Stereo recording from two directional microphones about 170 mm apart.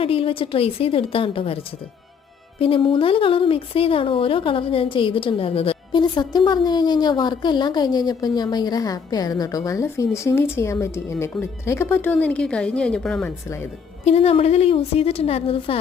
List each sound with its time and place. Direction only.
0.0 s a woman's voice: 35° left (ahead or behind)
2.6 s speech: 30° left (ahead or behind); by 13.3 s 5° left (ahead or behind)
14.0 s a woman's voice: 40° left (ahead or behind)